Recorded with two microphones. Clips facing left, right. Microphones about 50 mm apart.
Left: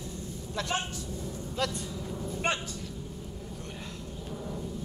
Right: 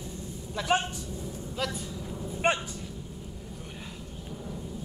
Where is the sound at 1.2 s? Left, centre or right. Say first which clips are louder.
Left 1 dB; centre.